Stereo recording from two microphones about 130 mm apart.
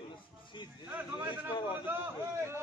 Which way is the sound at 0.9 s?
15° right (ahead or behind).